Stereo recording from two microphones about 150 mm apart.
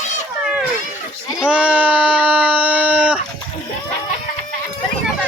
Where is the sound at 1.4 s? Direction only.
5° right (ahead or behind).